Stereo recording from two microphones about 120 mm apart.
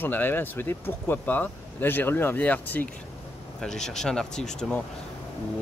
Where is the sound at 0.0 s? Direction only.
15° left (ahead or behind).